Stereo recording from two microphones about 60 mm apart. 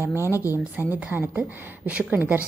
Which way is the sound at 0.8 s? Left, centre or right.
Right.